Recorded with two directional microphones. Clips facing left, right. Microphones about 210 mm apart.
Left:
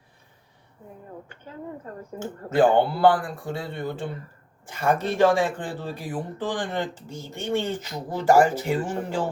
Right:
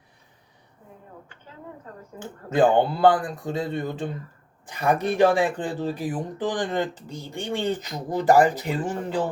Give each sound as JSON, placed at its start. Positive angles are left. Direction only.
{"t": 2.5, "sound": "a man's voice", "side_deg": -20}